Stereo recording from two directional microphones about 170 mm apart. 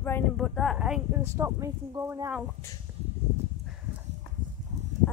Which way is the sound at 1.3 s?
15° right (ahead or behind).